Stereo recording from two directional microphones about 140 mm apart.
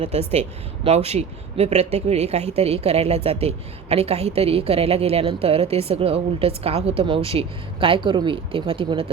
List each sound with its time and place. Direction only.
0.0 s a woman's voice: 45° right (ahead or behind)